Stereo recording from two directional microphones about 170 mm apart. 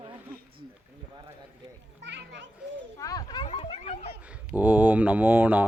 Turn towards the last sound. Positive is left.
turn(degrees=-10)  # may be behind; listen again after turning